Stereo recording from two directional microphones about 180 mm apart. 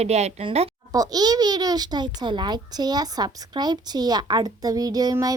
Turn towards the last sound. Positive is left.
turn(degrees=-20)  # may be behind; listen again after turning